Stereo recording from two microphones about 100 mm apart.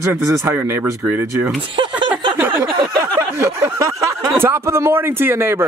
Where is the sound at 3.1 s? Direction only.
25° right (ahead or behind).